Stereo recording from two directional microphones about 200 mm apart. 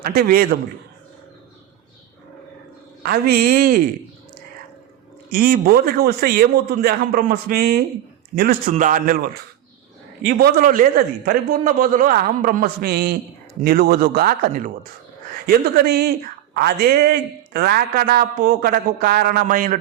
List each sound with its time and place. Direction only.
0.0 s speech: 45° right (ahead or behind)
3.0 s speech: 50° right (ahead or behind)
5.3 s speech: 45° right (ahead or behind)